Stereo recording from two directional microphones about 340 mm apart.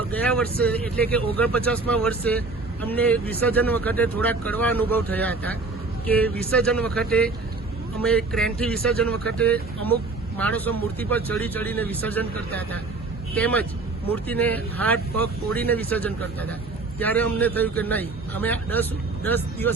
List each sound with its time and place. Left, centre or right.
0.1 s speech: centre